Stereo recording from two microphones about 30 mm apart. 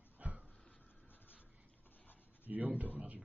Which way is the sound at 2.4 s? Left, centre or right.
Right.